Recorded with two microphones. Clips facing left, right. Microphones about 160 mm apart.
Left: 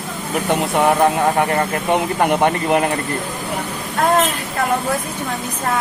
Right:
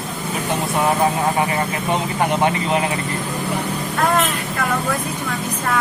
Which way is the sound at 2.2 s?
50° left (ahead or behind).